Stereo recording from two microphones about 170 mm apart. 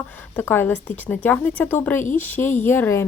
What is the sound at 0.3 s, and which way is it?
A woman's voice, 15° left (ahead or behind).